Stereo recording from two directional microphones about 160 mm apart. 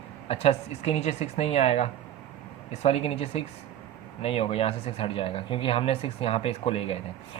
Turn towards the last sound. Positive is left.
turn(degrees=35)  # may be behind; listen again after turning